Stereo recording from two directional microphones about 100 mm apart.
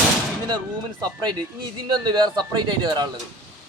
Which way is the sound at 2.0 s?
45° right (ahead or behind).